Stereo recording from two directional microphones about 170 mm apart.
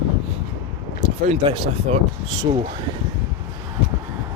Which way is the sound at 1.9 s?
40° right (ahead or behind).